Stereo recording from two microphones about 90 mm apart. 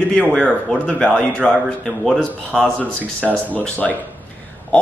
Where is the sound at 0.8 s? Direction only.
10° left (ahead or behind).